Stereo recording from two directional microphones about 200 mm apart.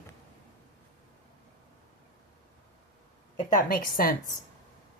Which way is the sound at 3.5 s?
45° left (ahead or behind).